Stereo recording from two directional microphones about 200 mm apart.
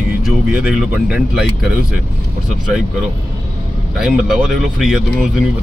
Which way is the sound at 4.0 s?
5° right (ahead or behind).